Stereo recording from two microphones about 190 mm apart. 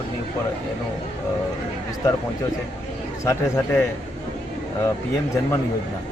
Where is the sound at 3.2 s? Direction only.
15° left (ahead or behind).